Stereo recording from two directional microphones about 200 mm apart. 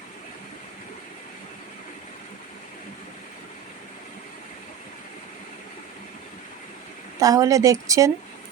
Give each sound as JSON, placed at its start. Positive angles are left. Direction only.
{"t": 7.2, "sound": "a woman's voice", "side_deg": -15}